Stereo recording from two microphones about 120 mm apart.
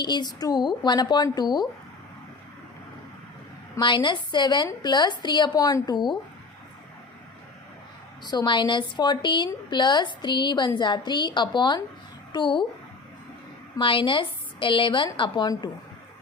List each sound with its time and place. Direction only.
0.0 s a woman's voice: 35° left (ahead or behind)
3.8 s a woman's voice: 40° left (ahead or behind)
8.2 s a woman's voice: 35° left (ahead or behind)
13.7 s a woman's voice: 45° left (ahead or behind)